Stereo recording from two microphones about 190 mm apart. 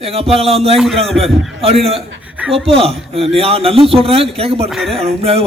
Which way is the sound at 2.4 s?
Centre (ahead or behind).